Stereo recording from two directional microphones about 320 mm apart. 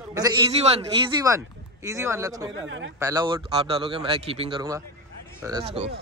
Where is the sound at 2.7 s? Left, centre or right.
Right.